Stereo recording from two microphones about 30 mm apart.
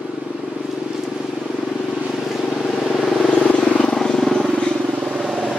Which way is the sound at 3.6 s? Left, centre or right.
Left.